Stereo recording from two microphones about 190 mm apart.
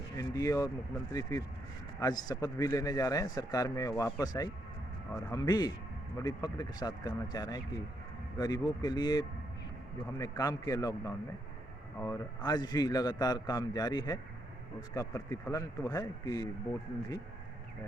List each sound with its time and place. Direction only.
0.2 s speech: 15° left (ahead or behind)